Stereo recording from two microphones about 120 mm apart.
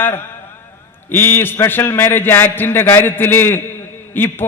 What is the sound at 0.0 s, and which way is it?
A man's voice, 20° left (ahead or behind).